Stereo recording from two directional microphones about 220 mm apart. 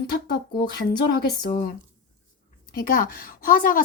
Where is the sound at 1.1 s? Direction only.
45° left (ahead or behind).